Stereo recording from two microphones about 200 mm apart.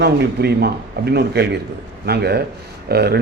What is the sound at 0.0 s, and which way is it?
Speech, 55° right (ahead or behind).